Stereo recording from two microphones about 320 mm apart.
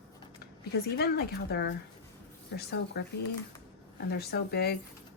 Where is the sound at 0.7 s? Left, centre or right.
Left.